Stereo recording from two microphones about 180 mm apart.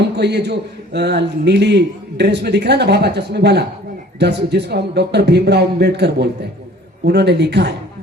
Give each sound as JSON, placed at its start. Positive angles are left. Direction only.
{"t": 0.2, "sound": "a man's voice", "side_deg": -65}